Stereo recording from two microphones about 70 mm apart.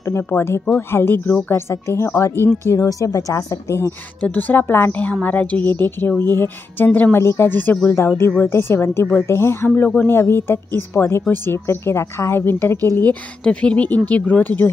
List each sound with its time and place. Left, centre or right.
0.3 s a woman's voice: left
2.7 s speech: left
4.2 s a woman's voice: left
13.4 s a woman's voice: centre